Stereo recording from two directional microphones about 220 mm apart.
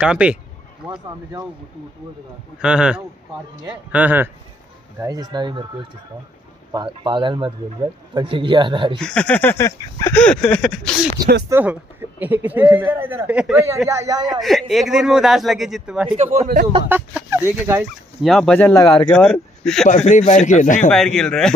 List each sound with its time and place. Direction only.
0.0 s a man's voice: 5° right (ahead or behind)
2.6 s a man's voice: 5° right (ahead or behind); by 9.0 s 20° right (ahead or behind)
9.0 s a sound: 5° left (ahead or behind)
10.1 s a man's voice: 5° left (ahead or behind)
11.4 s speech: 10° right (ahead or behind)
14.4 s a man's voice: centre (ahead or behind)
16.3 s speech: 40° right (ahead or behind)
16.9 s speech: 10° right (ahead or behind)
18.2 s a sound: centre (ahead or behind); by 19.1 s 15° left (ahead or behind)
19.1 s speech: 5° left (ahead or behind)
20.1 s speech: 35° left (ahead or behind)
20.9 s a man's voice: centre (ahead or behind)